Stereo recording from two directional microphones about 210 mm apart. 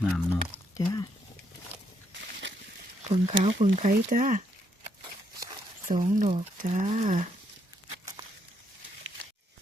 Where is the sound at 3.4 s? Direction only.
30° right (ahead or behind).